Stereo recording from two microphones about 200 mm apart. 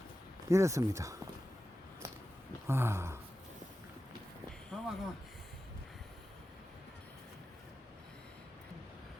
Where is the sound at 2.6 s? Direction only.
10° right (ahead or behind).